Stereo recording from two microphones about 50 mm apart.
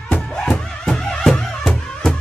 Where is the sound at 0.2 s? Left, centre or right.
Centre.